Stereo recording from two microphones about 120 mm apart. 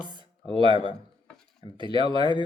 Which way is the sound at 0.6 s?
40° right (ahead or behind).